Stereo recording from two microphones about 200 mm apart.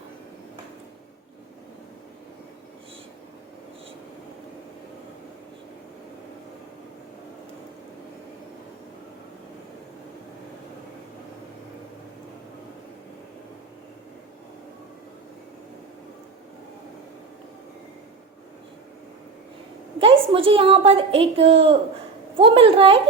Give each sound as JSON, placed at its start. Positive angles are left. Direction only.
{"t": 20.0, "sound": "a woman's voice", "side_deg": -25}